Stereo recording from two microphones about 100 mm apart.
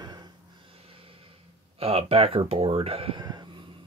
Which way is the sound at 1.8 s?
80° right.